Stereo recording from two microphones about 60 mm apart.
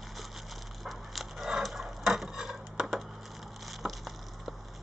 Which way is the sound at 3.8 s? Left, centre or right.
Centre.